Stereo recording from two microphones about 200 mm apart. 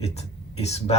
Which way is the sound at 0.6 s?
30° left (ahead or behind).